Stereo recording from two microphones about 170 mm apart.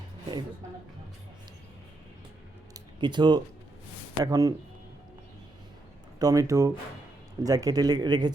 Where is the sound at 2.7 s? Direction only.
25° right (ahead or behind).